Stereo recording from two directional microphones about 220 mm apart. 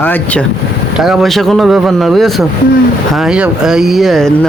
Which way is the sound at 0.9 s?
Centre (ahead or behind).